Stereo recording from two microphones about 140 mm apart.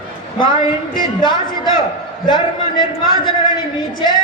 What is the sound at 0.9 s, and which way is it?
A man's voice, 35° left (ahead or behind).